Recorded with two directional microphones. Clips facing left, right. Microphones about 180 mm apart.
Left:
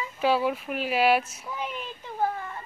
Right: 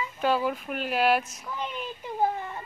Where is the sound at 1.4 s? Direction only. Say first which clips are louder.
Even; 5° left (ahead or behind).